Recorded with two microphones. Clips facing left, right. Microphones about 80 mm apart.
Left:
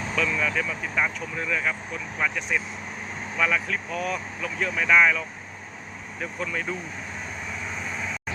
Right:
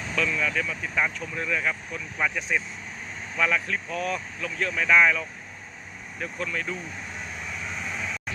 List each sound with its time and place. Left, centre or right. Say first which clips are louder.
0.2 s speech: even; centre